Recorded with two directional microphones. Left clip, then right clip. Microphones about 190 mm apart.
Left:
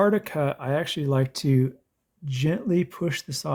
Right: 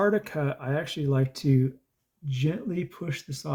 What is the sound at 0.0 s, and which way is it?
Speech, 45° left (ahead or behind).